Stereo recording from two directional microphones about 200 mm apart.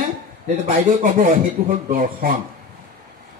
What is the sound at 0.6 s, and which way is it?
A man's voice, 40° right (ahead or behind).